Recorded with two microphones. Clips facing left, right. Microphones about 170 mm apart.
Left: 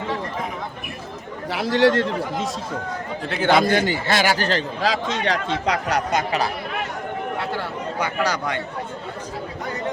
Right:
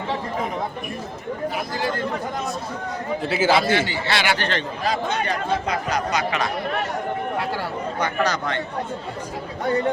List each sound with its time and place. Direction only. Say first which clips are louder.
1.5 s speech: left 9 dB; 80° left
3.2 s a man's voice: left 1 dB; 5° right (ahead or behind)
3.6 s a man's voice: left 2 dB; 45° left (ahead or behind)
4.8 s a man's voice: left 1 dB; 90° left
7.9 s speech: even; 10° left (ahead or behind)